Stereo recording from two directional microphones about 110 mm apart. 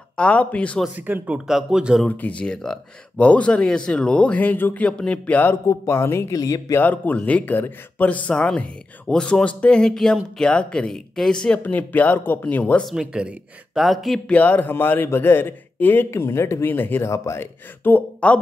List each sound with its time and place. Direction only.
0.1 s speech: 10° left (ahead or behind)
0.9 s speech: 15° right (ahead or behind)
2.0 s a man's voice: 15° left (ahead or behind); by 6.8 s 30° left (ahead or behind)
6.8 s speech: 15° left (ahead or behind)
12.8 s speech: 5° right (ahead or behind)
14.3 s a man's voice: 15° left (ahead or behind)